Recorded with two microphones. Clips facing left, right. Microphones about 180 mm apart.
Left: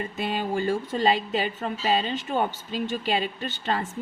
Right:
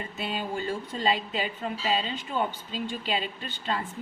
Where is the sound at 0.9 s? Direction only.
55° left (ahead or behind).